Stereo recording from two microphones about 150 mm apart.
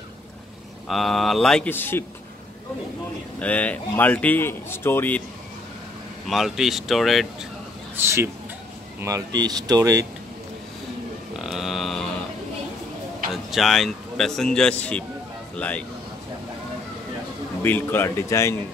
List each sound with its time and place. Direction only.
0.8 s speech: centre (ahead or behind)
3.3 s speech: 10° left (ahead or behind)
6.2 s speech: centre (ahead or behind)
8.0 s speech: 15° right (ahead or behind)
11.3 s a sound: centre (ahead or behind)
13.3 s a man's voice: centre (ahead or behind)
17.6 s speech: 15° left (ahead or behind)